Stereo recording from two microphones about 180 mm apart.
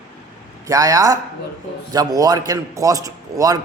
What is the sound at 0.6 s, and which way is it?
A man's voice, 20° right (ahead or behind).